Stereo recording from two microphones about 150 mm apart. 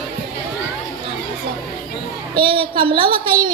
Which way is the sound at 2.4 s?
35° right (ahead or behind).